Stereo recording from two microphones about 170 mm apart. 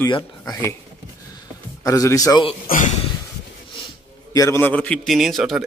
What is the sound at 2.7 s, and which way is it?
Speech, 45° left (ahead or behind).